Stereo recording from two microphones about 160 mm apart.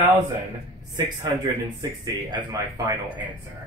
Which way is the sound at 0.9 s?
25° right (ahead or behind).